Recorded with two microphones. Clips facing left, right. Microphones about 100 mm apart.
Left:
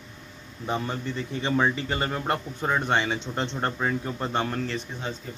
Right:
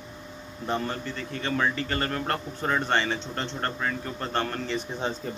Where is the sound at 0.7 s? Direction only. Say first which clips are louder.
Even; 15° left (ahead or behind).